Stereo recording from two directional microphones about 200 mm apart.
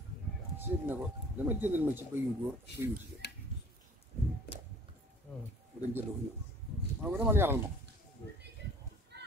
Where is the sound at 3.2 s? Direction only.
60° left (ahead or behind).